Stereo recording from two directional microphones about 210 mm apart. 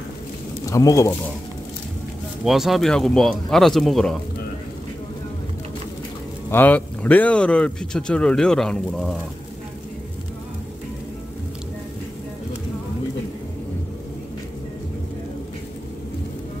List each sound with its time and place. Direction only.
0.7 s speech: 15° left (ahead or behind)
2.4 s speech: centre (ahead or behind)
6.5 s speech: 10° left (ahead or behind)